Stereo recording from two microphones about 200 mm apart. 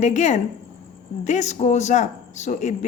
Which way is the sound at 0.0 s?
35° left (ahead or behind).